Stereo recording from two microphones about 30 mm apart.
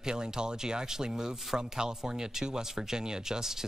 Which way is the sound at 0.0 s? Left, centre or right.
Right.